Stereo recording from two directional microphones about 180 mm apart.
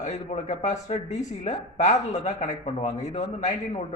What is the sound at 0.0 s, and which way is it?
A man's voice, 40° left (ahead or behind).